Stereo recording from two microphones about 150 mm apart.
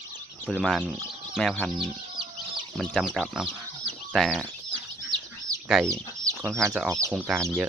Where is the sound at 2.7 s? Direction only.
Centre (ahead or behind).